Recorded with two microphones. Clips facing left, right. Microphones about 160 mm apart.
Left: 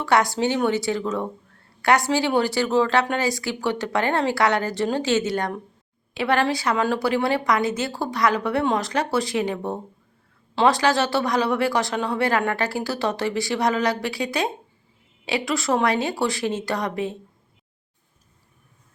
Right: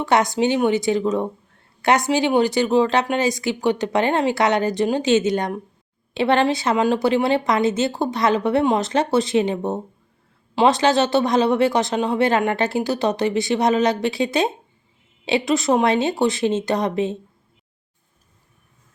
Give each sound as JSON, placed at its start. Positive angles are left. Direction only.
{"t": 0.0, "sound": "speech", "side_deg": -20}